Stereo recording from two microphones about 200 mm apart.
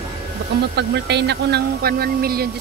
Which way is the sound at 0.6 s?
55° right (ahead or behind).